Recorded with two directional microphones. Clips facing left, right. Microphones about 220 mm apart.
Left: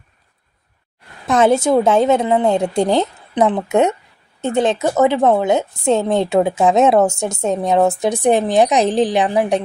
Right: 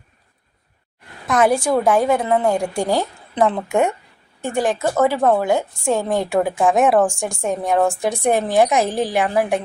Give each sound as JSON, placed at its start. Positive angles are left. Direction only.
{"t": 1.3, "sound": "a woman's voice", "side_deg": 25}